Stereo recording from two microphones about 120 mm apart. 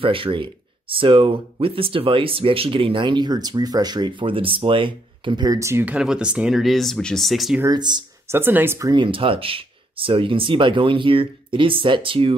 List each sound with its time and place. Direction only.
0.0 s speech: 45° right (ahead or behind)
5.6 s speech: 20° right (ahead or behind)
5.9 s speech: 5° right (ahead or behind)
7.6 s speech: 35° right (ahead or behind)
8.3 s speech: 15° right (ahead or behind)
8.9 s speech: 45° right (ahead or behind)